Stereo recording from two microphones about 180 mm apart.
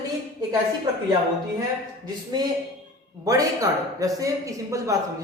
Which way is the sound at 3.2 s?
20° right (ahead or behind).